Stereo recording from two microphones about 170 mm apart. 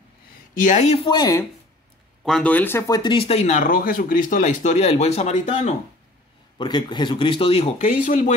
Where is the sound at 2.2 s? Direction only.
5° left (ahead or behind); by 5.7 s 40° left (ahead or behind).